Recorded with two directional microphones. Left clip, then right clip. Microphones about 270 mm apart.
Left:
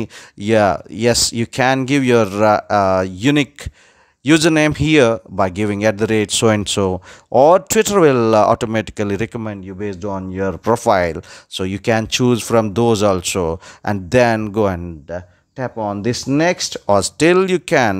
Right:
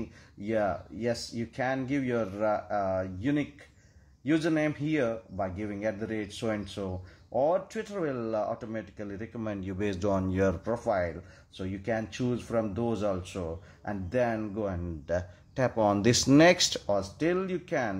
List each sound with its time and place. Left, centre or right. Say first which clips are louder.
0.4 s speech: left 15 dB; left; by 10.5 s centre
10.6 s speech: left 15 dB; left
15.0 s speech: left 1 dB; centre
16.8 s speech: left 15 dB; left